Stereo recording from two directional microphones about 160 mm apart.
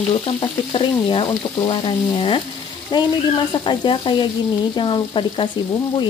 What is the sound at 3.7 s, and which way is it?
Speech, 30° left (ahead or behind).